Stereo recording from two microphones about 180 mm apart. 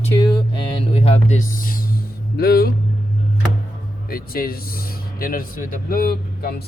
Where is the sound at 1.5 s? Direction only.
50° left (ahead or behind).